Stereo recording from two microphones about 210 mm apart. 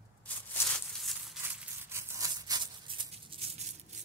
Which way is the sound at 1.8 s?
15° right (ahead or behind).